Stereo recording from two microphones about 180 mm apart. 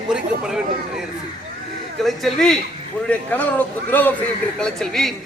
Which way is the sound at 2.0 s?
Centre (ahead or behind).